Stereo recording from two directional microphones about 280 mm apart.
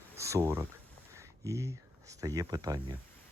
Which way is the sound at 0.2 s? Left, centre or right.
Centre.